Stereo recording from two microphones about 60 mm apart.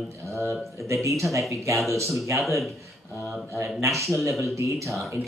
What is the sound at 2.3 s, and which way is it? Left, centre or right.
Speech, centre.